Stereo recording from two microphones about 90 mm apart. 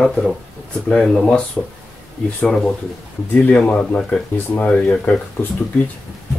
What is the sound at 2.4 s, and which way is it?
Speech, 5° left (ahead or behind).